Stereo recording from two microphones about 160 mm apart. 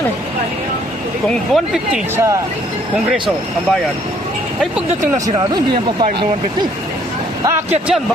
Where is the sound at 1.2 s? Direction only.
Centre (ahead or behind).